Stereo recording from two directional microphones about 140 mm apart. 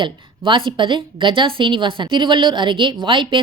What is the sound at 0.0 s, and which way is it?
Speech, 35° right (ahead or behind).